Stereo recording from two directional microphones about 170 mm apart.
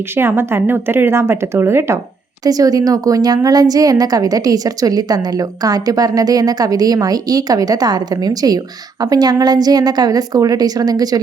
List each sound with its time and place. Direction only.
0.1 s a woman's voice: 15° right (ahead or behind)